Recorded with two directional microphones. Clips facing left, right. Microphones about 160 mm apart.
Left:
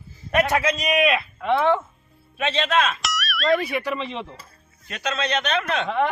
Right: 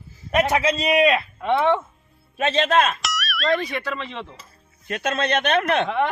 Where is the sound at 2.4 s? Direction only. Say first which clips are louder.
Right 3 dB; 45° right (ahead or behind).